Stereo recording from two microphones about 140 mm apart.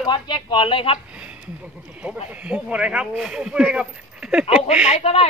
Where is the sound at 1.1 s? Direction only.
10° right (ahead or behind).